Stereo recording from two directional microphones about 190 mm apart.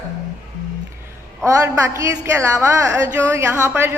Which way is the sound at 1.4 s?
15° right (ahead or behind).